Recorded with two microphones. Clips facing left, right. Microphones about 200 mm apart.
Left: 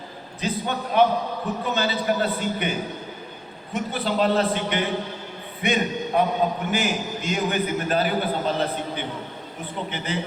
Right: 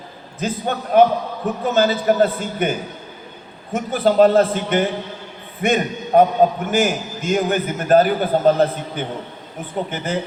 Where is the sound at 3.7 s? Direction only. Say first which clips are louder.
Right 8 dB; 45° right (ahead or behind).